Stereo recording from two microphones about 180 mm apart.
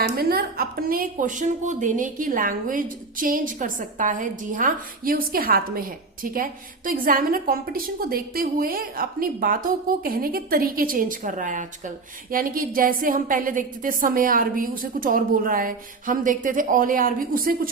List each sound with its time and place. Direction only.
0.2 s a woman's voice: 55° right (ahead or behind)